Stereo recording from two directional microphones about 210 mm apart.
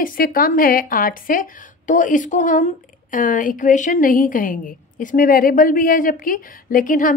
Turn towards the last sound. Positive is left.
turn(degrees=40)  # may be behind; listen again after turning